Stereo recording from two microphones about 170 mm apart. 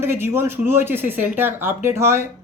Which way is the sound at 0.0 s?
15° right (ahead or behind).